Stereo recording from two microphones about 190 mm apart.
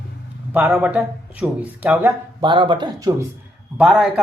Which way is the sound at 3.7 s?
5° right (ahead or behind).